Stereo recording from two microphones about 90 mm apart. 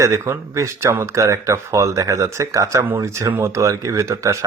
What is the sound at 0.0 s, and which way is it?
Speech, 35° right (ahead or behind).